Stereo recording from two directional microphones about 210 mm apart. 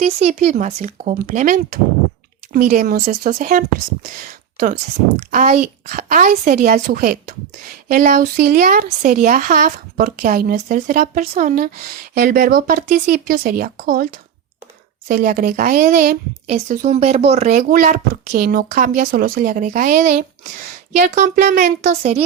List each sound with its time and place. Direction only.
0.0 s speech: 30° right (ahead or behind)